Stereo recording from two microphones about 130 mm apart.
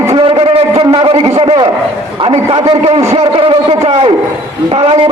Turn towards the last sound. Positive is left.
turn(degrees=-45)  # may be behind; listen again after turning